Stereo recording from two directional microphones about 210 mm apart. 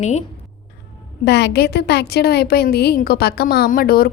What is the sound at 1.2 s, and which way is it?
A woman's voice, 55° left (ahead or behind).